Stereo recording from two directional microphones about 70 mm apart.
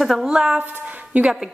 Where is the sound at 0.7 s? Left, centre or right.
Right.